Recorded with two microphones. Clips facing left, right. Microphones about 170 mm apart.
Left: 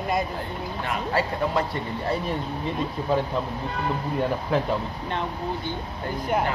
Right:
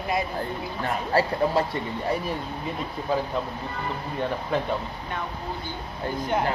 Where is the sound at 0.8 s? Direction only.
35° right (ahead or behind).